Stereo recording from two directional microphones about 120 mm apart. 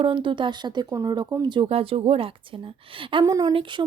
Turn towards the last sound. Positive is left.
turn(degrees=-45)  # may be behind; listen again after turning